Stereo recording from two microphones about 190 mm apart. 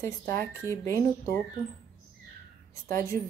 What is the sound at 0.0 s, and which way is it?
Speech, 15° left (ahead or behind).